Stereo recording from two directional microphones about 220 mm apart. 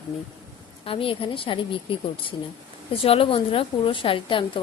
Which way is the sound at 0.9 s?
25° left (ahead or behind).